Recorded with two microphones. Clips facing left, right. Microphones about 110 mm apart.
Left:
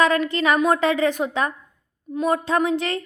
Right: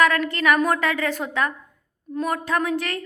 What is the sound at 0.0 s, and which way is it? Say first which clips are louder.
A woman's voice: left 1 dB; 20° left (ahead or behind).